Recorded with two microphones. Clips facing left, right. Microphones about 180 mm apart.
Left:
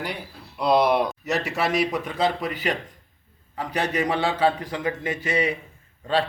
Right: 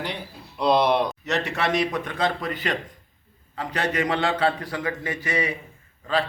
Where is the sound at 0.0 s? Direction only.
5° left (ahead or behind).